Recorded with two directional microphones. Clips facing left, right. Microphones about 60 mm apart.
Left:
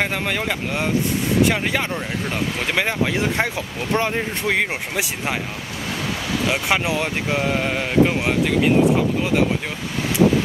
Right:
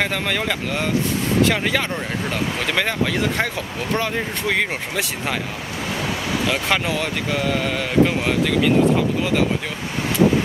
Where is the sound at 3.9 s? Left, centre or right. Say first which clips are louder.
Left 3 dB; left.